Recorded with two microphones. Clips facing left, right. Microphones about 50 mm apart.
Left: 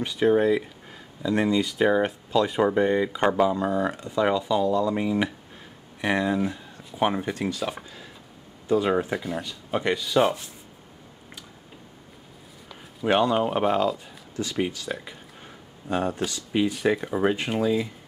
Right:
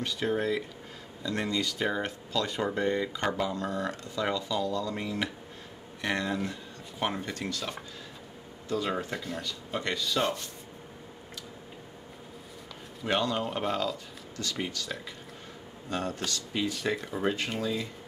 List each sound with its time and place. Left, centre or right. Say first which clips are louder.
0.0 s speech: left 9 dB; centre
13.0 s speech: left 8 dB; centre